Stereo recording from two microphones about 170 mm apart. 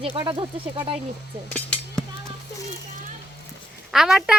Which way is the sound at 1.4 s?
5° left (ahead or behind).